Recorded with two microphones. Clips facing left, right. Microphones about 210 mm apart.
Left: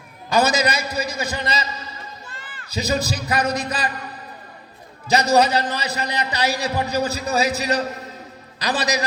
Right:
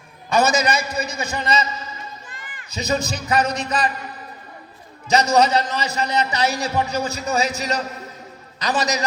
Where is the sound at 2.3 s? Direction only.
15° right (ahead or behind).